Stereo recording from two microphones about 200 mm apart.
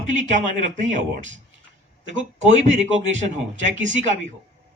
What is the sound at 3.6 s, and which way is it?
Speech, 35° right (ahead or behind).